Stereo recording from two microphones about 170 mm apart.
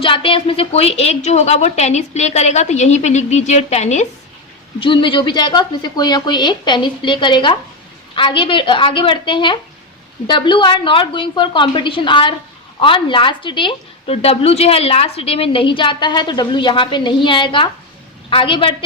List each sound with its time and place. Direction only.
0.0 s a woman's voice: 30° left (ahead or behind)
4.8 s a woman's voice: 30° left (ahead or behind)